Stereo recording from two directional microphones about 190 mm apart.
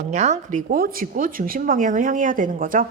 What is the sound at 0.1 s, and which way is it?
A woman's voice, 35° right (ahead or behind).